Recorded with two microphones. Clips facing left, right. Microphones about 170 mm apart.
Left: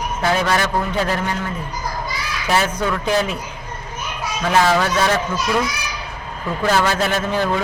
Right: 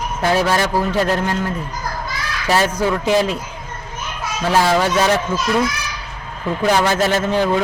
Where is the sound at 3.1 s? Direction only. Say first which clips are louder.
Right 3 dB; 20° right (ahead or behind).